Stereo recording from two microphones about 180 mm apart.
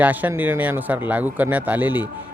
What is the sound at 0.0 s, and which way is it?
A man's voice, 10° right (ahead or behind).